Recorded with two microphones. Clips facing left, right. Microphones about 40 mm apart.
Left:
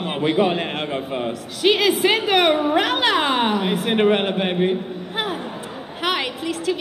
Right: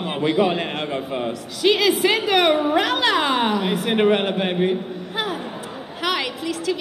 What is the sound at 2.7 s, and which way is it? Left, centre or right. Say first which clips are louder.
A man's voice: even; left.